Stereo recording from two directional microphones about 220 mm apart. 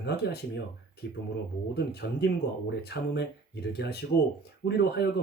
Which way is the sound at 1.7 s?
45° left (ahead or behind).